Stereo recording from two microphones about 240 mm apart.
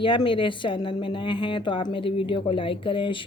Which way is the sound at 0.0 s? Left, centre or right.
Left.